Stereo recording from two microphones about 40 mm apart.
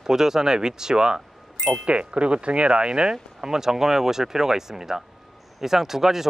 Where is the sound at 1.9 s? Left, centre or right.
Right; by 6.2 s centre.